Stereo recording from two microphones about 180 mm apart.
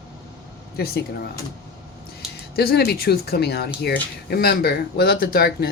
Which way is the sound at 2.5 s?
60° left (ahead or behind).